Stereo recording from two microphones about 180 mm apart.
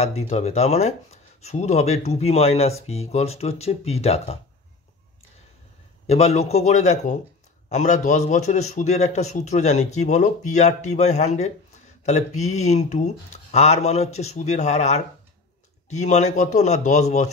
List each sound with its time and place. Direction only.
0.0 s a man's voice: 35° left (ahead or behind)
6.0 s a man's voice: 35° left (ahead or behind)